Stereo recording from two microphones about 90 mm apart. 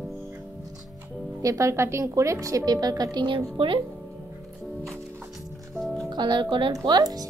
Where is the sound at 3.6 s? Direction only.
90° right.